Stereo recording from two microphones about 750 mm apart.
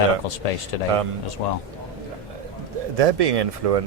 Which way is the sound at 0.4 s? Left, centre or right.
Left.